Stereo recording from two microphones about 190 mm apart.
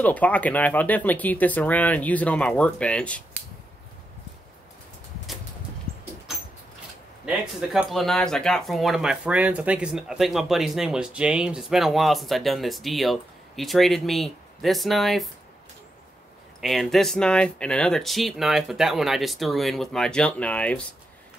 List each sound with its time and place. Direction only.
0.0 s speech: 10° left (ahead or behind)
7.2 s speech: centre (ahead or behind)
16.6 s speech: centre (ahead or behind)